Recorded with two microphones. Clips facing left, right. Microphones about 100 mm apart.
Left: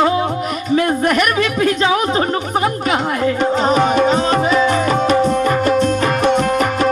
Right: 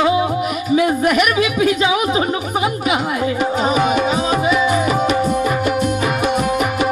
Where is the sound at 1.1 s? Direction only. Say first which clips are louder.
Even; 5° right (ahead or behind).